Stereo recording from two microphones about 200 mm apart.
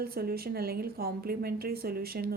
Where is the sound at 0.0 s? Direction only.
50° right (ahead or behind).